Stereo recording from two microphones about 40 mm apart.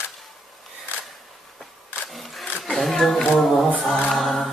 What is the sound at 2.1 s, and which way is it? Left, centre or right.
Sewing machine, centre.